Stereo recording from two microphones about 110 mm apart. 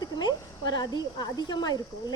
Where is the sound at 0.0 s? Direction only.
40° left (ahead or behind).